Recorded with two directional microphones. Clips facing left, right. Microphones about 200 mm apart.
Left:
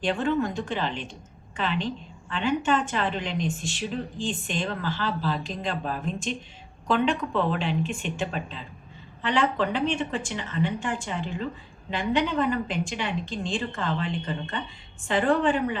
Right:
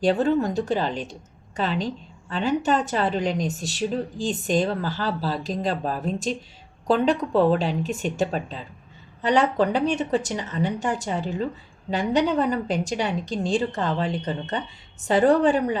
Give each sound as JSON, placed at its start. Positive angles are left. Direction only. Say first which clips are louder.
{"t": 0.0, "sound": "a woman's voice", "louder": "right 5 dB", "side_deg": -40}